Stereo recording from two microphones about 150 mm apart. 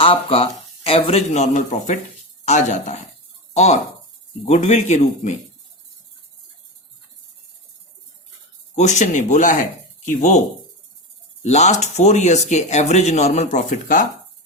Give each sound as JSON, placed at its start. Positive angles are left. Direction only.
{"t": 0.0, "sound": "speech", "side_deg": 40}
{"t": 8.7, "sound": "speech", "side_deg": 50}
{"t": 11.4, "sound": "speech", "side_deg": 50}